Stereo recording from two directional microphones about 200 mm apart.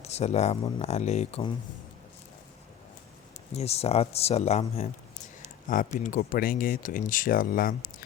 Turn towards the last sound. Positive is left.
turn(degrees=45)  # may be behind; listen again after turning